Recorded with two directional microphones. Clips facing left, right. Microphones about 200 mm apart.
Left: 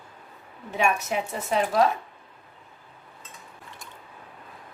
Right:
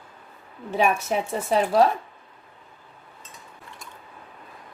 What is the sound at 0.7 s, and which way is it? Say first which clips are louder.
Speech: right 3 dB; 35° right (ahead or behind).